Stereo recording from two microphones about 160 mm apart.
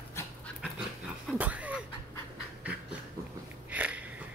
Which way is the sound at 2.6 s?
5° right (ahead or behind).